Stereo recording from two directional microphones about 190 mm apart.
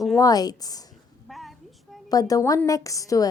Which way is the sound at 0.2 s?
20° left (ahead or behind).